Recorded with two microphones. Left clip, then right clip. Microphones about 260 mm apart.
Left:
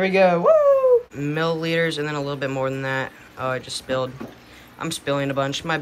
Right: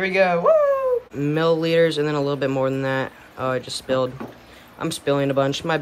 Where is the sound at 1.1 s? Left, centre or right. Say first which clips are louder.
Right 4 dB; centre.